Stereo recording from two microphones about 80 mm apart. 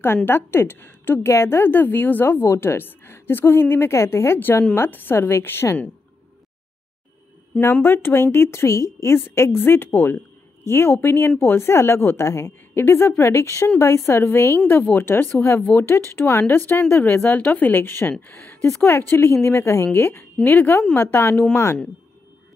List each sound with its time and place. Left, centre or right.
0.0 s a woman's voice: left
7.8 s a woman's voice: left
12.3 s speech: left
12.7 s a woman's voice: left